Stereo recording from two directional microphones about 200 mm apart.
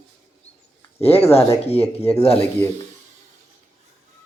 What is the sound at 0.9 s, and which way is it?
Speech, 30° left (ahead or behind).